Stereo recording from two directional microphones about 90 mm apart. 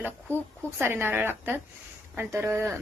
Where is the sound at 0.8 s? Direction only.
25° right (ahead or behind).